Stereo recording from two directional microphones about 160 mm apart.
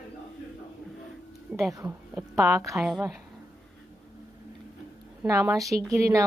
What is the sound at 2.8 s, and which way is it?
Speech, centre (ahead or behind).